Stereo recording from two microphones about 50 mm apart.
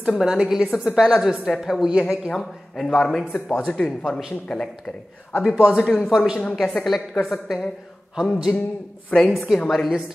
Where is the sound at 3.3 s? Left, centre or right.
Left.